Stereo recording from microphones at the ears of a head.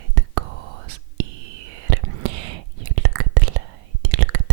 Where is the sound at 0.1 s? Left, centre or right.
Right.